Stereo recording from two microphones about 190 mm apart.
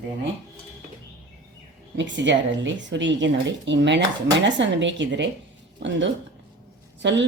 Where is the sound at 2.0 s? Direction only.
70° right (ahead or behind).